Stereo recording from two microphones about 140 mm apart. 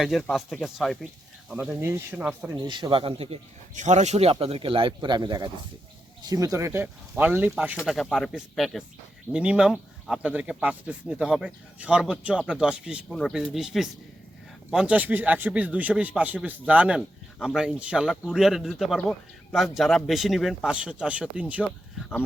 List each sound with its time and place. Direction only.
0.0 s a man's voice: 5° left (ahead or behind)
1.8 s speech: 15° right (ahead or behind)
2.6 s speech: 35° right (ahead or behind)
3.8 s speech: 55° right (ahead or behind); by 7.5 s 10° right (ahead or behind)
7.9 s a man's voice: centre (ahead or behind)
13.1 s a man's voice: 5° left (ahead or behind)